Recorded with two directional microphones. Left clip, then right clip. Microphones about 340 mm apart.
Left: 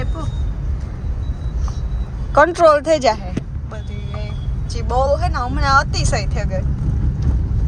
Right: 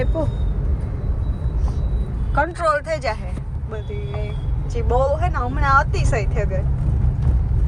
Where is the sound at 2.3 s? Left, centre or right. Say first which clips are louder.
Left 8 dB; left.